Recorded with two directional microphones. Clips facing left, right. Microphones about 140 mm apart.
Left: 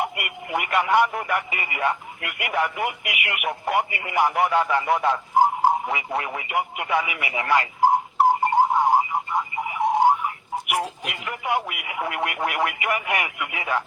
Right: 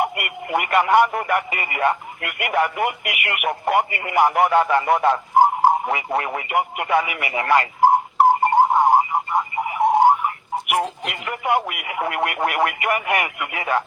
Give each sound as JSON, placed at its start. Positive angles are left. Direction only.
{"t": 0.0, "sound": "speech", "side_deg": -55}